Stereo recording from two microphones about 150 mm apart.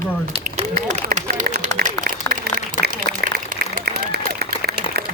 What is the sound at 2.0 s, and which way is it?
Applause, 65° right (ahead or behind).